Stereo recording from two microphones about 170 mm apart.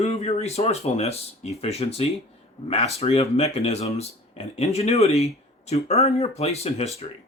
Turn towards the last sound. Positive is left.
turn(degrees=40)  # may be behind; listen again after turning